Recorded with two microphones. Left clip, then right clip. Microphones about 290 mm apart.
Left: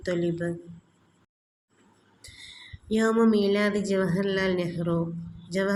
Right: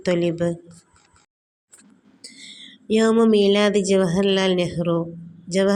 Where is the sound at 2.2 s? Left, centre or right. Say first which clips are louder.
Right 5 dB; centre.